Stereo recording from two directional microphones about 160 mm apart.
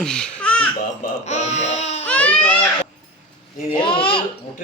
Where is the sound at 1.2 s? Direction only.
45° left (ahead or behind).